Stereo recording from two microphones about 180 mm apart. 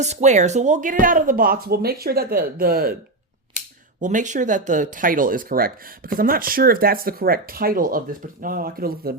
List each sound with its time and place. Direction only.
0.0 s speech: 40° right (ahead or behind); by 2.9 s 55° right (ahead or behind)
4.0 s speech: 45° right (ahead or behind)